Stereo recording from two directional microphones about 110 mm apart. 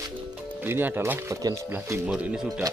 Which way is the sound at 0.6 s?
20° right (ahead or behind).